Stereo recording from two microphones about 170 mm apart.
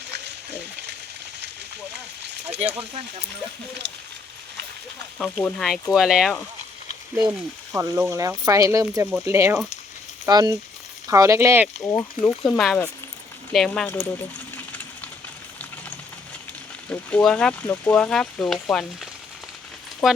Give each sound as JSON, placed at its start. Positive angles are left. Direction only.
{"t": 2.6, "sound": "speech", "side_deg": -40}
{"t": 5.2, "sound": "speech", "side_deg": 5}
{"t": 7.2, "sound": "speech", "side_deg": -15}
{"t": 11.8, "sound": "speech", "side_deg": 20}
{"t": 12.4, "sound": "speech", "side_deg": 5}
{"t": 14.5, "sound": "a sound", "side_deg": 10}
{"t": 16.9, "sound": "speech", "side_deg": 5}
{"t": 20.0, "sound": "speech", "side_deg": 0}